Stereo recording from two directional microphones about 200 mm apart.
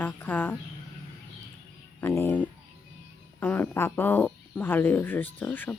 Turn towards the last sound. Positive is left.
turn(degrees=10)  # may be behind; listen again after turning